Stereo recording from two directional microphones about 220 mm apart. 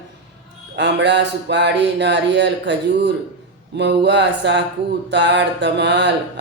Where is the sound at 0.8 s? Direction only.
50° right (ahead or behind).